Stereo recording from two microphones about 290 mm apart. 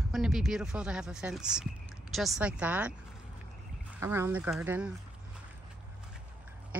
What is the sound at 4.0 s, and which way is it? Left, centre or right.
Speech, centre.